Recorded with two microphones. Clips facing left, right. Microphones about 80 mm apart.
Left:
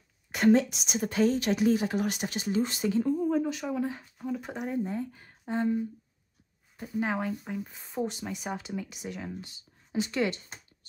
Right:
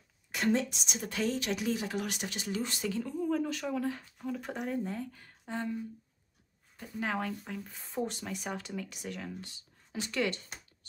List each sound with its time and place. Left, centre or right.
0.3 s a woman's voice: left
0.9 s speech: left
2.5 s speech: left
3.3 s speech: centre
6.8 s speech: centre